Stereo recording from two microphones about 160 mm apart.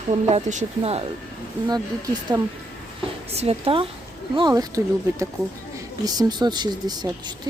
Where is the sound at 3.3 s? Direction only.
40° right (ahead or behind).